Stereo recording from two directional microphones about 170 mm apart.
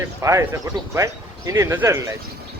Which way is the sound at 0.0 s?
15° right (ahead or behind).